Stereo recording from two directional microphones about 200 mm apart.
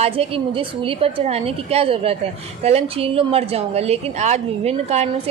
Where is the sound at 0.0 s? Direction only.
30° right (ahead or behind).